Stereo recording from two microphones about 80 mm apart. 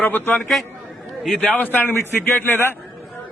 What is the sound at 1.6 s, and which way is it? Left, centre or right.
A man's voice, left.